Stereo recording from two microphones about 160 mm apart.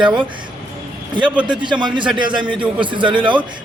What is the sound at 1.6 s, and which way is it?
A man's voice, 30° right (ahead or behind).